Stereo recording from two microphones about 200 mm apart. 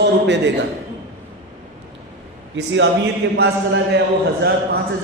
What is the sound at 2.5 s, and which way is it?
Speech, 65° right (ahead or behind).